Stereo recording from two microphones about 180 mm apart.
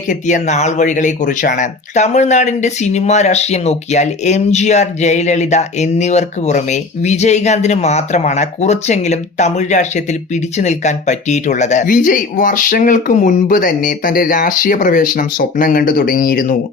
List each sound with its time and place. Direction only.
0.1 s speech: 45° left (ahead or behind)